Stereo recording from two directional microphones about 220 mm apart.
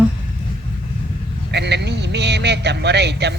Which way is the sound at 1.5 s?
50° right (ahead or behind).